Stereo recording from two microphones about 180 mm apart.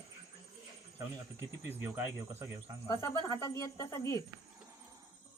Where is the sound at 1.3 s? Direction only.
15° right (ahead or behind).